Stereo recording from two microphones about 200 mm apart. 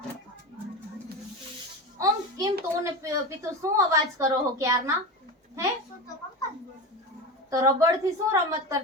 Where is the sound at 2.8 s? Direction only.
15° right (ahead or behind).